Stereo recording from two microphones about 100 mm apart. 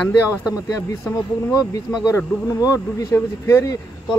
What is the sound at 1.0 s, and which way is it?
Speech, 35° left (ahead or behind).